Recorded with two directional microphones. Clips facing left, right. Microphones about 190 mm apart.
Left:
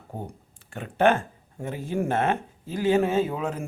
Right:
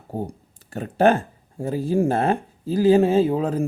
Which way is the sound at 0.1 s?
35° right (ahead or behind).